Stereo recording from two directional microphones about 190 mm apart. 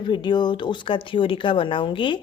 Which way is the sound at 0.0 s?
25° left (ahead or behind).